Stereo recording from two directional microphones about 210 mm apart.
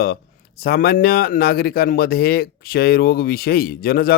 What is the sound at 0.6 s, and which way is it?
Speech, 45° left (ahead or behind).